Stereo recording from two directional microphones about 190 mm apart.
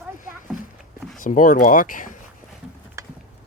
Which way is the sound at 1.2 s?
45° left (ahead or behind).